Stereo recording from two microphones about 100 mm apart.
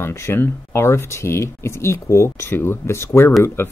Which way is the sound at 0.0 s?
25° left (ahead or behind).